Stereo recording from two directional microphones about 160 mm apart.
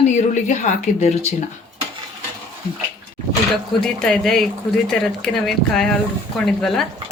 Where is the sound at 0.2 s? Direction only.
50° left (ahead or behind).